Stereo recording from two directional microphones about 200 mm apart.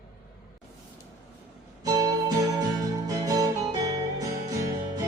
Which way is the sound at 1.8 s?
20° right (ahead or behind).